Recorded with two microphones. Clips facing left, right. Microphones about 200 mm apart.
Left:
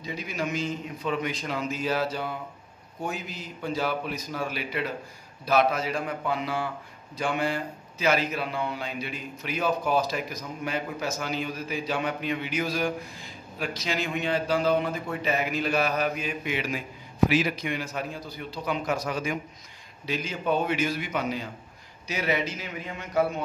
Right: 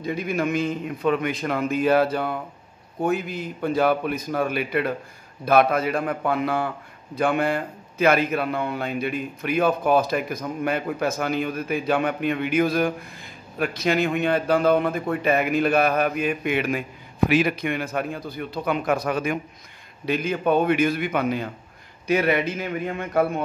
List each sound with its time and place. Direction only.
0.0 s a man's voice: 55° right (ahead or behind)